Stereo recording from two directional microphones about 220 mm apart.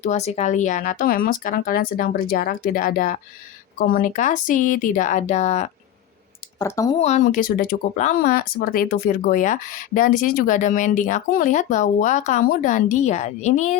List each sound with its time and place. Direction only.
0.0 s speech: 30° left (ahead or behind)
6.6 s speech: 15° left (ahead or behind)
7.0 s speech: 35° left (ahead or behind)